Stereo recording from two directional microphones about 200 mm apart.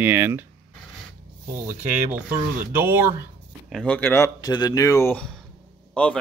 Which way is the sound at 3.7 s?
5° left (ahead or behind).